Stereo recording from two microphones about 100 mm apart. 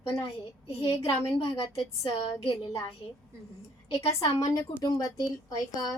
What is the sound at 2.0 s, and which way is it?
A woman's voice, 75° left (ahead or behind).